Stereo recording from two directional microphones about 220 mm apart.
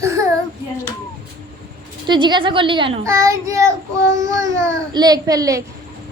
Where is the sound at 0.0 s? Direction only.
15° right (ahead or behind).